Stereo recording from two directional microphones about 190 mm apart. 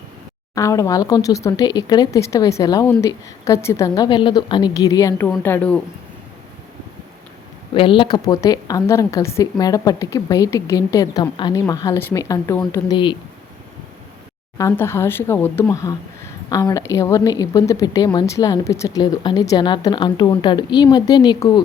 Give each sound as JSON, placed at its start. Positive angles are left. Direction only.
{"t": 0.5, "sound": "a woman's voice", "side_deg": 15}
{"t": 7.7, "sound": "a woman's voice", "side_deg": 25}
{"t": 14.6, "sound": "a woman's voice", "side_deg": 15}